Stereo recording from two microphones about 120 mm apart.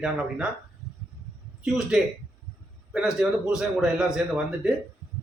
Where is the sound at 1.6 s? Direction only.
5° right (ahead or behind).